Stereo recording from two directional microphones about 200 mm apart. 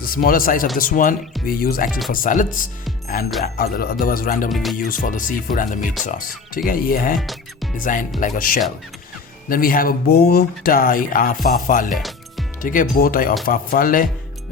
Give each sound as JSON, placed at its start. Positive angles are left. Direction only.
{"t": 0.0, "sound": "speech", "side_deg": 45}
{"t": 1.9, "sound": "speech", "side_deg": 0}
{"t": 2.1, "sound": "speech", "side_deg": 40}
{"t": 4.5, "sound": "speech", "side_deg": 0}
{"t": 4.8, "sound": "speech", "side_deg": 45}
{"t": 7.2, "sound": "speech", "side_deg": 0}
{"t": 7.8, "sound": "speech", "side_deg": 40}
{"t": 11.9, "sound": "music", "side_deg": 0}
{"t": 12.6, "sound": "speech", "side_deg": 40}